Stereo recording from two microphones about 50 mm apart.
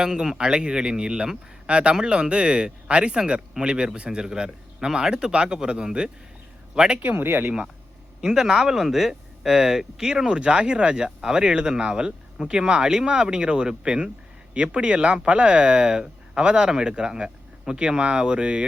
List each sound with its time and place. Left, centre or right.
0.0 s speech: centre
7.0 s speech: right
8.2 s speech: centre